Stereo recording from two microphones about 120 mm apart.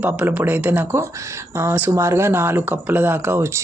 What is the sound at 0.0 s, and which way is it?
Speech, 10° right (ahead or behind).